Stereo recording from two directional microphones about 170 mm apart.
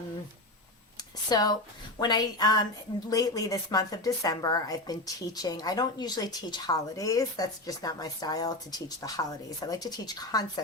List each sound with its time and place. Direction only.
1.3 s speech: 25° left (ahead or behind)